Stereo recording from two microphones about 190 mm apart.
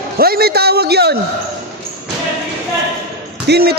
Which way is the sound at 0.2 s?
55° right (ahead or behind).